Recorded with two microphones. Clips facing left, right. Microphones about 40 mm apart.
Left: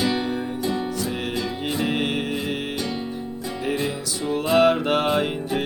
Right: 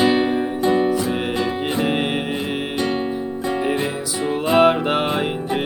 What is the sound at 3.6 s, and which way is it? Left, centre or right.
Music, right.